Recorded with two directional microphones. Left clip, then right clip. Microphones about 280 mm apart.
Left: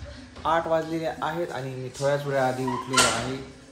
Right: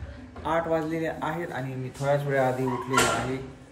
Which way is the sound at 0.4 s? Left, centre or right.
Centre.